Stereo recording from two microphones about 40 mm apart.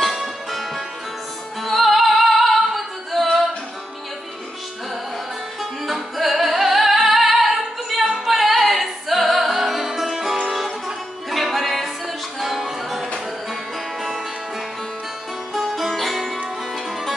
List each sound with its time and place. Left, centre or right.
0.5 s music: centre
5.6 s music: centre
15.5 s music: centre